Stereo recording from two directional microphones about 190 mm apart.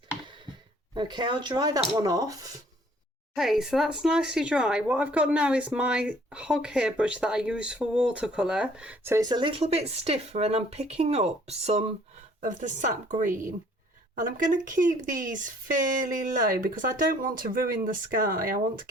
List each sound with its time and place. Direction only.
0.9 s speech: 25° right (ahead or behind)
3.3 s speech: centre (ahead or behind)
9.4 s speech: 30° right (ahead or behind); by 18.9 s 50° right (ahead or behind)